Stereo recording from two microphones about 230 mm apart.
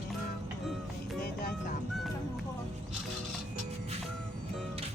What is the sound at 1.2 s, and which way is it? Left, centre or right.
Vehicle, left.